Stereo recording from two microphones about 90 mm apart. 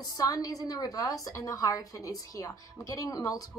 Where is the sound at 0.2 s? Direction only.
40° left (ahead or behind).